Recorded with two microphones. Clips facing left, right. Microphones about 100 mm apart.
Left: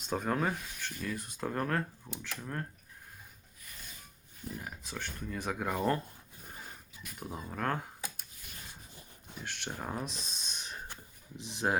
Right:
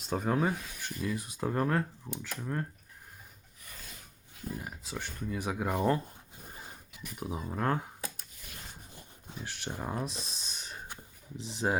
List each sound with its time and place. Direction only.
0.1 s speech: 5° right (ahead or behind)
4.6 s speech: 5° right (ahead or behind)
7.2 s speech: 10° right (ahead or behind)
9.3 s speech: 5° right (ahead or behind)